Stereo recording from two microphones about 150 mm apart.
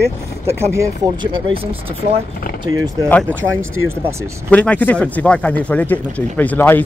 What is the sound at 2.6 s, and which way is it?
Speech, 25° right (ahead or behind).